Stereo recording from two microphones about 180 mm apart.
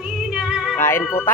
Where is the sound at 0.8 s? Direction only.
15° left (ahead or behind).